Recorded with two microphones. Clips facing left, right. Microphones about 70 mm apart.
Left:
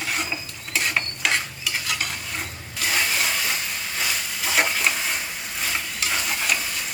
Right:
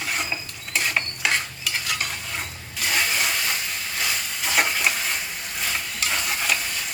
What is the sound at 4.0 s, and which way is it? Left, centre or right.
Stir, centre.